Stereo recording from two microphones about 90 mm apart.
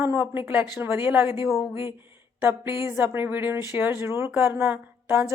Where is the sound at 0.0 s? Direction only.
25° right (ahead or behind).